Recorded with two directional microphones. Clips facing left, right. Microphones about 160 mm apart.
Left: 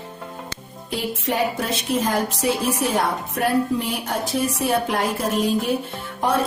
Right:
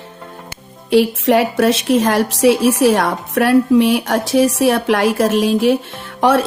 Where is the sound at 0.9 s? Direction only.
85° right.